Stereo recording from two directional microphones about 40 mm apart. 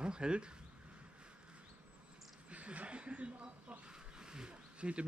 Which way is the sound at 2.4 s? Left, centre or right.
Right.